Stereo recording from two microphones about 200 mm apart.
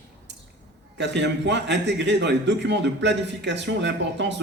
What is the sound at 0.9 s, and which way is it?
A man's voice, 60° right (ahead or behind).